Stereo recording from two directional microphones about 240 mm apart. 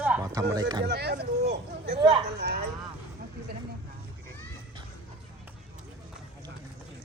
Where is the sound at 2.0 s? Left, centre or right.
Right.